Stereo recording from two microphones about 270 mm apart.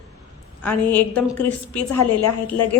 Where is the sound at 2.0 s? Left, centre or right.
Left.